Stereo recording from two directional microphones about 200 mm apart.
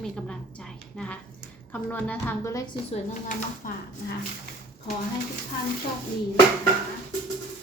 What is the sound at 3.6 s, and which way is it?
Speech, 40° left (ahead or behind).